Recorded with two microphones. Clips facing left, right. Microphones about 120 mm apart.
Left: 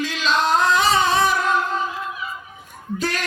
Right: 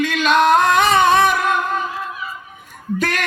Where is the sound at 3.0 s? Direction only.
60° right (ahead or behind).